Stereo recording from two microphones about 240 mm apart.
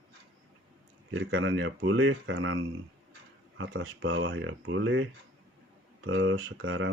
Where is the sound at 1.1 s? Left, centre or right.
Right.